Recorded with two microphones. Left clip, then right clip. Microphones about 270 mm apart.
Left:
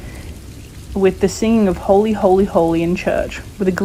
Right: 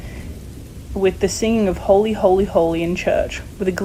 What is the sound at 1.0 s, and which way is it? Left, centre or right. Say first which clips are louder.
Speech: left 2 dB; centre.